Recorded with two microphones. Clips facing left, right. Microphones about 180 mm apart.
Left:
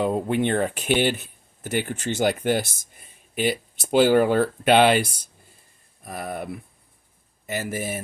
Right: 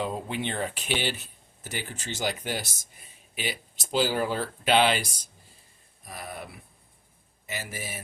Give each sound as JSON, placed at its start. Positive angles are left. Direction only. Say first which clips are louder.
{"t": 0.0, "sound": "a man's voice", "louder": "left 8 dB", "side_deg": 55}